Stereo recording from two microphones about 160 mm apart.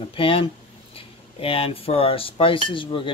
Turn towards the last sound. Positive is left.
turn(degrees=30)  # may be behind; listen again after turning